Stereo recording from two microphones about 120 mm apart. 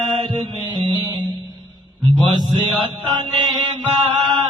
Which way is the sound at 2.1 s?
40° right (ahead or behind).